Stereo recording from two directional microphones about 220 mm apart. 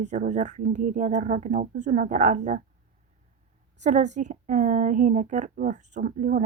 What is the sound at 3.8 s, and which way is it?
A woman's voice, 35° right (ahead or behind).